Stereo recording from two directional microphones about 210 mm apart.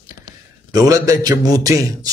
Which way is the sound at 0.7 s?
15° right (ahead or behind).